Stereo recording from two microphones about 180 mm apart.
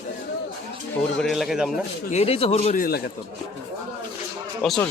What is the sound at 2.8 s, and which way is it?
Speech, 60° left (ahead or behind).